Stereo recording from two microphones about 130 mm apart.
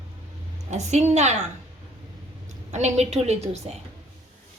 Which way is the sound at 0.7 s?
60° right (ahead or behind).